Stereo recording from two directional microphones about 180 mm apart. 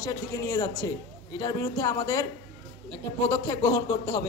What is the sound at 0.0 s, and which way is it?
A man's voice, 20° left (ahead or behind).